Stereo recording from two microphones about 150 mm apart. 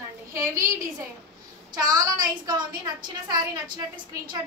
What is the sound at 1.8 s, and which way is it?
A woman's voice, 25° right (ahead or behind).